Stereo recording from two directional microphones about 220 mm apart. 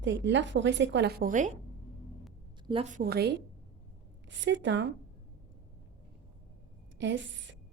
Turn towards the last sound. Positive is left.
turn(degrees=-55)  # may be behind; listen again after turning